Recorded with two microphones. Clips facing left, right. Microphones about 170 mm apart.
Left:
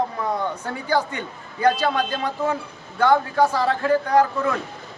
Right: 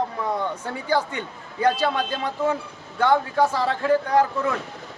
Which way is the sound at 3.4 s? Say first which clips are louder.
Left 2 dB; 25° right (ahead or behind).